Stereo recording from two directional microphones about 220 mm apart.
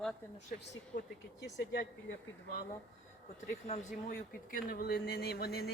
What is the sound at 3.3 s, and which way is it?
Speech, 35° left (ahead or behind).